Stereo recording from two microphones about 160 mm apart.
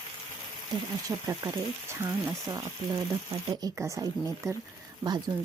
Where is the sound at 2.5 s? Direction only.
25° right (ahead or behind).